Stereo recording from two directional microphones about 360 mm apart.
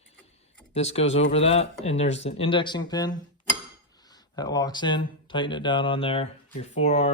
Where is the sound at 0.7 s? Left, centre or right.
Centre.